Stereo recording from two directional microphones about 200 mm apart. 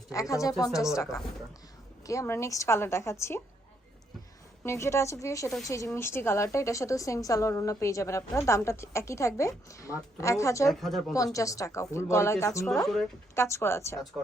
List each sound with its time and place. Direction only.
0.1 s a woman's voice: 15° left (ahead or behind)
0.7 s a woman's voice: centre (ahead or behind)
2.0 s a woman's voice: 15° left (ahead or behind)
4.6 s a woman's voice: 15° left (ahead or behind)
10.7 s a woman's voice: centre (ahead or behind)
11.1 s a woman's voice: 15° left (ahead or behind)